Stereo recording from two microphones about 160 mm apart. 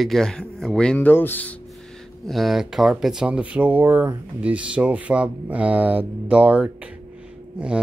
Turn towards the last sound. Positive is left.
turn(degrees=-5)  # may be behind; listen again after turning